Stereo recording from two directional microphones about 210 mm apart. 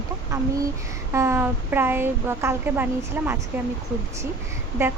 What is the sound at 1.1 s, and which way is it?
A woman's voice, 10° right (ahead or behind).